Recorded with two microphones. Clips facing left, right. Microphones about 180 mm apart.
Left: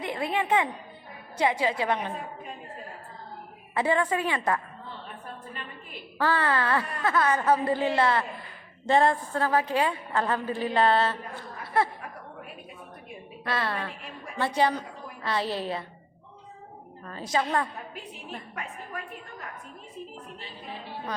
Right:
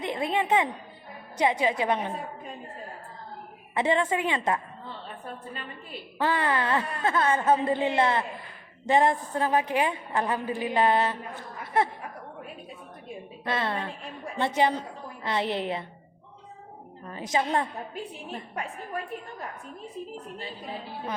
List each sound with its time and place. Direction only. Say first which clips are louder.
0.0 s speech: right 1 dB; 20° right (ahead or behind)
3.8 s speech: even; 25° right (ahead or behind)
6.1 s a woman's voice: even; 20° right (ahead or behind)
13.4 s a woman's voice: right 1 dB; 20° right (ahead or behind)
17.0 s a sound: right 1 dB; 20° right (ahead or behind)
17.3 s speech: right 1 dB; 25° right (ahead or behind)